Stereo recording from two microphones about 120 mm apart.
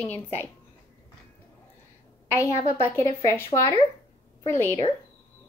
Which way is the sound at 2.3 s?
25° left (ahead or behind).